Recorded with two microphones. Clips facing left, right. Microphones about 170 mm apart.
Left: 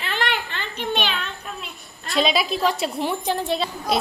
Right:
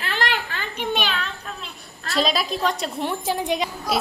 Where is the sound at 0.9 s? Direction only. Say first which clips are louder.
Left 1 dB; centre (ahead or behind).